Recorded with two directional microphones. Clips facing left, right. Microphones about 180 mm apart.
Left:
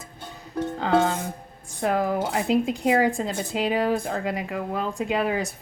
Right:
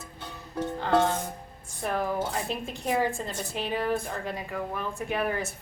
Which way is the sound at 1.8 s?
90° left.